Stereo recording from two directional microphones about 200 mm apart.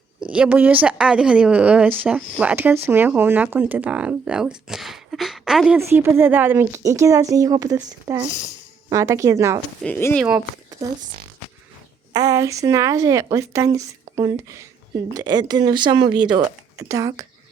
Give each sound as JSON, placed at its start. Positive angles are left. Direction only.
{"t": 0.3, "sound": "a woman's voice", "side_deg": -5}
{"t": 5.8, "sound": "a woman's voice", "side_deg": -15}
{"t": 9.8, "sound": "speech", "side_deg": 10}
{"t": 10.2, "sound": "speech", "side_deg": -10}
{"t": 12.1, "sound": "a woman's voice", "side_deg": -15}